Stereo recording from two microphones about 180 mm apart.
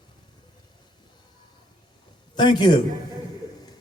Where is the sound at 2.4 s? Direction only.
25° left (ahead or behind).